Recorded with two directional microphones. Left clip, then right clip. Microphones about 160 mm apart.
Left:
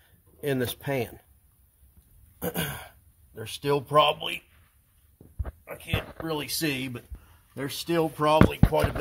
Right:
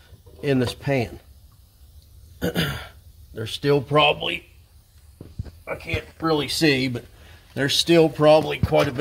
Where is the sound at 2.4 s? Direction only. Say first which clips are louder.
Right 7 dB; 15° left (ahead or behind).